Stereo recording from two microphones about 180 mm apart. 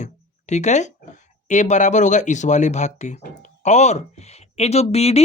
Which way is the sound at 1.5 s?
40° left (ahead or behind).